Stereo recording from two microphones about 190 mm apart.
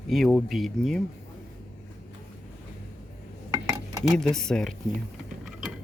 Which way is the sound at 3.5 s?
15° right (ahead or behind).